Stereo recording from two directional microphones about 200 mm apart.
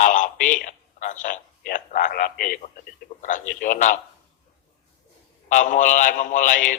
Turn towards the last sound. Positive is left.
turn(degrees=40)  # may be behind; listen again after turning